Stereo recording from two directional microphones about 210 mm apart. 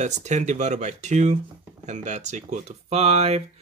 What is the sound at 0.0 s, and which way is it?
Speech, 35° right (ahead or behind).